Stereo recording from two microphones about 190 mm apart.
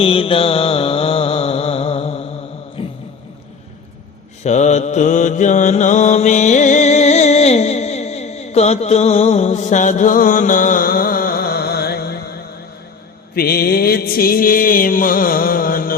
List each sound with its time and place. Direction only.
0.0 s mantra: 30° left (ahead or behind)
2.8 s a sound: 25° left (ahead or behind)
4.4 s mantra: 40° left (ahead or behind); by 11.9 s 55° left (ahead or behind)
13.3 s mantra: 55° left (ahead or behind)